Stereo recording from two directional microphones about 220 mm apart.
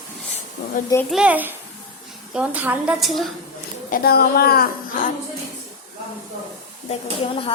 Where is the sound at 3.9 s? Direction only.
45° left (ahead or behind).